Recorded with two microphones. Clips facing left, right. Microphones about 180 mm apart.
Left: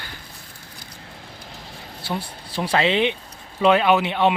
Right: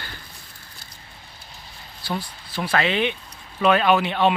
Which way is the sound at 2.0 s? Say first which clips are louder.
Even; 25° left (ahead or behind).